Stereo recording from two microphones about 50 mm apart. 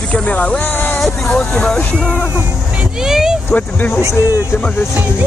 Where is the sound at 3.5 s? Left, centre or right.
Left.